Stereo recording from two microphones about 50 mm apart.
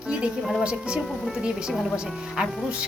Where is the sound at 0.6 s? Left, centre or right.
Centre.